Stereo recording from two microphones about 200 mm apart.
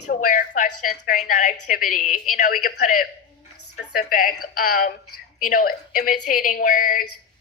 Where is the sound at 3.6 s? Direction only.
90° left.